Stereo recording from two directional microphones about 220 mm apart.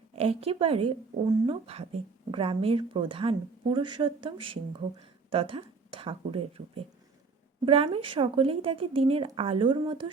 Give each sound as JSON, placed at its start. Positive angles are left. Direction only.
{"t": 0.2, "sound": "speech", "side_deg": -25}
{"t": 7.6, "sound": "speech", "side_deg": -25}